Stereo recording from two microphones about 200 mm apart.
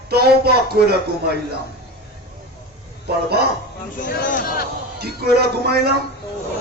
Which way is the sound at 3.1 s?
55° right (ahead or behind).